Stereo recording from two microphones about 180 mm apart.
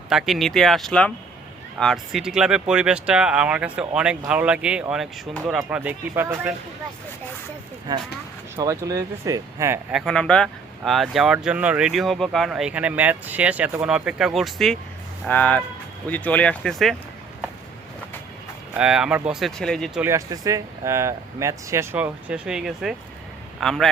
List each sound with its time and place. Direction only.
0.1 s speech: centre (ahead or behind)
7.9 s speech: 20° right (ahead or behind)
9.9 s speech: centre (ahead or behind)
18.7 s speech: 5° right (ahead or behind)
20.0 s speech: 15° right (ahead or behind); by 23.9 s centre (ahead or behind)